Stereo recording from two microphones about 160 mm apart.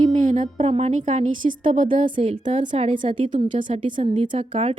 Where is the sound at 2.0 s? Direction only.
35° right (ahead or behind).